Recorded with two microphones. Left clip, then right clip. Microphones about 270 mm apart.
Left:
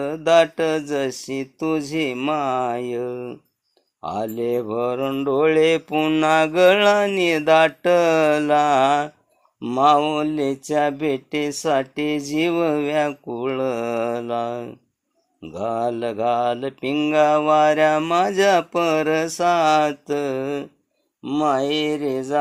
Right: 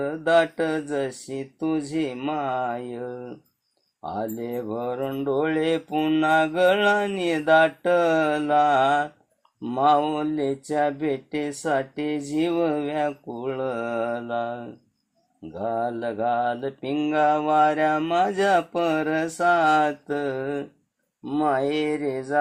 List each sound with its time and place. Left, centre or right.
0.0 s mantra: left